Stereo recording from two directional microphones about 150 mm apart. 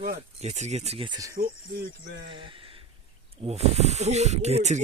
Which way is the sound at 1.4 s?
90° right.